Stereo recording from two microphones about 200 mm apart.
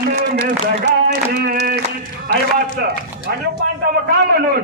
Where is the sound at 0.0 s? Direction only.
50° right (ahead or behind).